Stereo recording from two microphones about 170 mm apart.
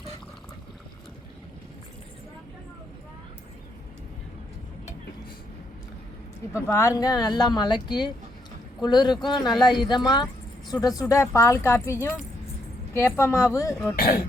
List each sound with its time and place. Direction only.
6.7 s speech: 20° left (ahead or behind)